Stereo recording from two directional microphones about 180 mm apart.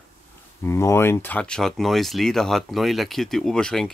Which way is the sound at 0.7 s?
15° left (ahead or behind).